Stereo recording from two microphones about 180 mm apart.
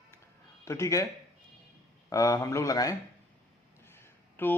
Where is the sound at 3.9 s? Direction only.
15° left (ahead or behind).